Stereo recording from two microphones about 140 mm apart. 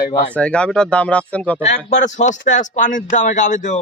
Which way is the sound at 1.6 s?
60° left (ahead or behind).